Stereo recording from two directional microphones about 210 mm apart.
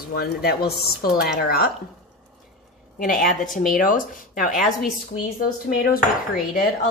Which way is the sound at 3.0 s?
40° left (ahead or behind).